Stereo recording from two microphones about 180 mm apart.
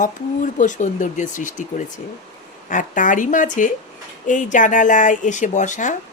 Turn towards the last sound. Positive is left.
turn(degrees=45)  # may be behind; listen again after turning